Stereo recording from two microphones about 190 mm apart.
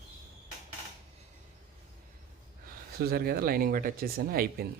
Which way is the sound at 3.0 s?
55° right (ahead or behind).